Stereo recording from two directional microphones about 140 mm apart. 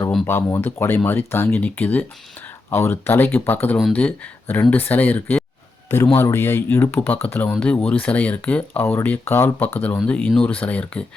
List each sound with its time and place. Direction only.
0.3 s speech: 15° left (ahead or behind)